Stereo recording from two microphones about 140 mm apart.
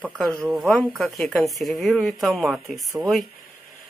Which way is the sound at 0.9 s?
Centre (ahead or behind).